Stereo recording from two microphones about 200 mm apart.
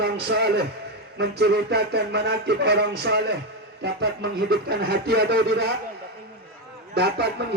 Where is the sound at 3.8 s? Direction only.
55° right (ahead or behind).